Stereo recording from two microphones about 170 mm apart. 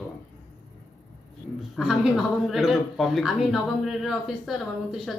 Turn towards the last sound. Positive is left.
turn(degrees=0)  # may be behind; listen again after turning